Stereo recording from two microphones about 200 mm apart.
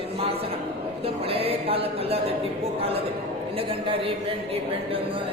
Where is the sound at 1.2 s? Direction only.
30° right (ahead or behind).